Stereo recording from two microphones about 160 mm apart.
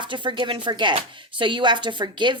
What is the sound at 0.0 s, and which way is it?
Speech, 30° right (ahead or behind).